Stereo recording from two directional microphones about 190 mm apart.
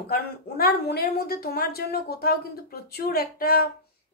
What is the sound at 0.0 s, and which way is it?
A woman's voice, 55° left (ahead or behind).